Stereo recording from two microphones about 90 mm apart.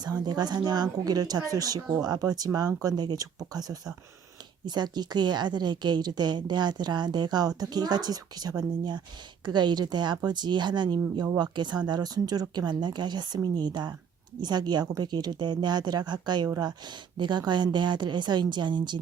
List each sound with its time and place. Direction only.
0.3 s a woman's voice: 50° right (ahead or behind)